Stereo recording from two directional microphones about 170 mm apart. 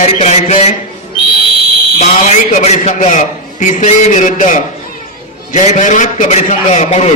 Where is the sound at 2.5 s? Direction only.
45° left (ahead or behind).